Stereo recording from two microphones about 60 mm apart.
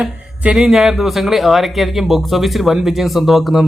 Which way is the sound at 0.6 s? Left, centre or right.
Centre.